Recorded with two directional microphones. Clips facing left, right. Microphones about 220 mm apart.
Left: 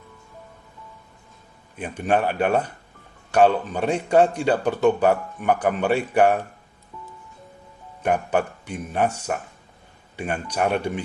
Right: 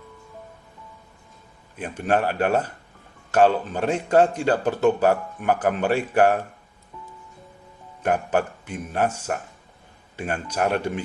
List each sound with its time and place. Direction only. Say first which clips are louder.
1.9 s speech: left 1 dB; 5° right (ahead or behind)
8.0 s speech: even; 5° right (ahead or behind)
10.4 s speech: left 1 dB; 5° right (ahead or behind)